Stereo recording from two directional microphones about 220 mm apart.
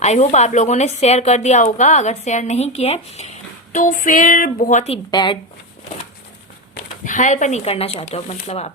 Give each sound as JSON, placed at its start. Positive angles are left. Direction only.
{"t": 0.0, "sound": "a woman's voice", "side_deg": 30}
{"t": 5.1, "sound": "speech", "side_deg": 20}
{"t": 6.7, "sound": "speech", "side_deg": 35}